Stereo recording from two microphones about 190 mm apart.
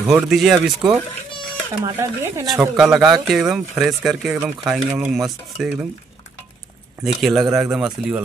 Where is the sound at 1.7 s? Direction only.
15° right (ahead or behind).